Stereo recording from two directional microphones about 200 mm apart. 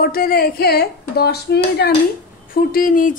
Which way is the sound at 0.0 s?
50° left (ahead or behind).